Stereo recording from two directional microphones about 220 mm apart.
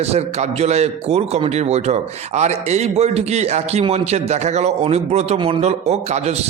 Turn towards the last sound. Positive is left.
turn(degrees=-30)  # may be behind; listen again after turning